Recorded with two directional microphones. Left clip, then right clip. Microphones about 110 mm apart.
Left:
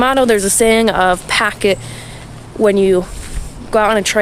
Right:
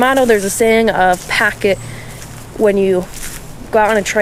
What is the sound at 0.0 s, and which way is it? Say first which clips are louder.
Speech: right 1 dB; 40° left (ahead or behind).